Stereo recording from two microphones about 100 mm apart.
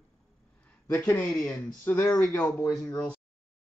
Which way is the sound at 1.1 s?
10° left (ahead or behind).